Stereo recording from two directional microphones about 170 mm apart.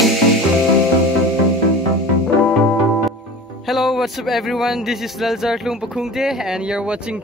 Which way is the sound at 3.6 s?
Centre (ahead or behind).